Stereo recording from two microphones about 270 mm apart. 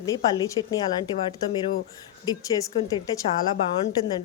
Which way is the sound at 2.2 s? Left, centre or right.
Centre.